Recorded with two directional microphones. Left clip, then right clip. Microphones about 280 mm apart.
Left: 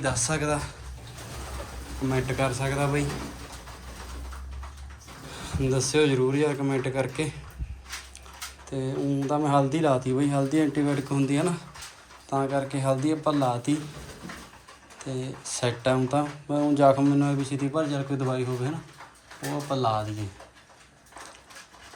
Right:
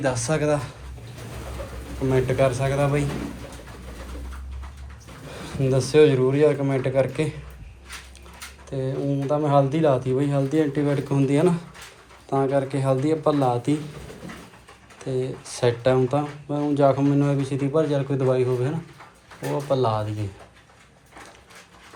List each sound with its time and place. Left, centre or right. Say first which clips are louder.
0.0 s speech: right 4 dB; centre
2.0 s speech: right 7 dB; centre
5.3 s speech: right 4 dB; centre
8.7 s speech: right 3 dB; centre
15.0 s speech: right 7 dB; centre